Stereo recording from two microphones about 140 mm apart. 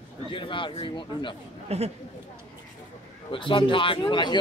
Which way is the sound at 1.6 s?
45° right (ahead or behind).